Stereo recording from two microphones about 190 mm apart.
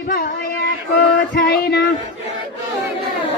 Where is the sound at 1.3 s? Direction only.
60° left (ahead or behind).